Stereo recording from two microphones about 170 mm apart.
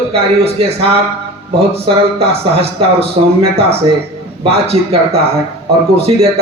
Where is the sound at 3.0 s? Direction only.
35° right (ahead or behind).